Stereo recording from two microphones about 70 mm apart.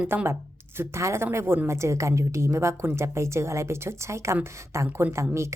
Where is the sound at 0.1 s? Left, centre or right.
Right.